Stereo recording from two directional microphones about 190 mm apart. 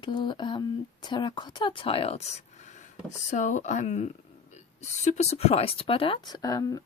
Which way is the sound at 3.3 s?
40° left (ahead or behind).